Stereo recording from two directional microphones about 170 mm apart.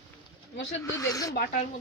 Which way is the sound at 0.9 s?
20° left (ahead or behind).